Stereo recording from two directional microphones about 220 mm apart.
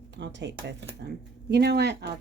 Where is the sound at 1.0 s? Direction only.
50° right (ahead or behind).